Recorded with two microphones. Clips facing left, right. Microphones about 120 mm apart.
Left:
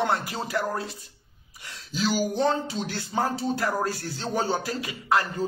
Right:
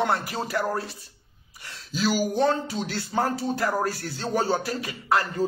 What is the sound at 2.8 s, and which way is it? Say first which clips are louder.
Speech: right 2 dB; 30° right (ahead or behind).